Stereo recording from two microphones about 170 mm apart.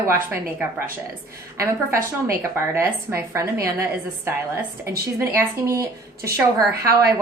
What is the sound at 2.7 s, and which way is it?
A woman's voice, 15° right (ahead or behind).